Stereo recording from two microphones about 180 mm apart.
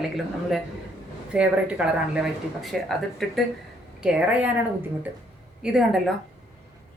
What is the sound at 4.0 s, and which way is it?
Speech, 5° right (ahead or behind).